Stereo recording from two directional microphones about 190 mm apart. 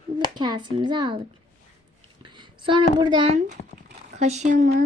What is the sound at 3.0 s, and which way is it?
Speech, 25° right (ahead or behind).